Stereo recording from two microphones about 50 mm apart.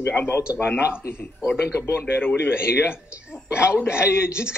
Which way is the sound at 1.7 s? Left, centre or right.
Left.